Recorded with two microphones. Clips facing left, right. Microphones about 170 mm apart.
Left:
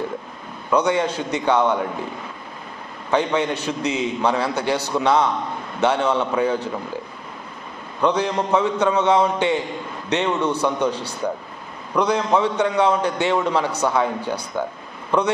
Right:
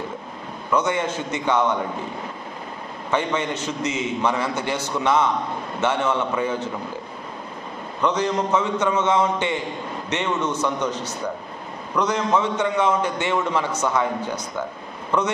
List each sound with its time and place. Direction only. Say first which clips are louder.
0.7 s a man's voice: left 3 dB; 15° left (ahead or behind)
3.1 s a man's voice: left 3 dB; 15° left (ahead or behind)
5.8 s a man's voice: left 3 dB; 15° left (ahead or behind)
8.0 s a man's voice: left 2 dB; 10° left (ahead or behind)